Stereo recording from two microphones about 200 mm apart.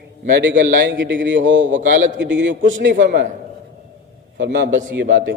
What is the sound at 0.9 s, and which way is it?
A man's voice, 65° right (ahead or behind).